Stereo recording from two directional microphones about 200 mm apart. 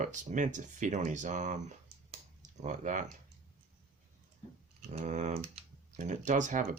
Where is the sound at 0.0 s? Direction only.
40° right (ahead or behind).